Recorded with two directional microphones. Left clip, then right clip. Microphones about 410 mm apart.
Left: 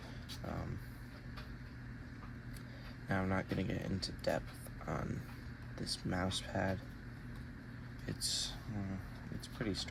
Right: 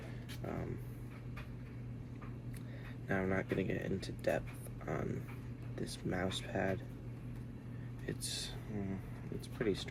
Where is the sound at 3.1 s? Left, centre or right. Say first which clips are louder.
Right 2 dB; centre.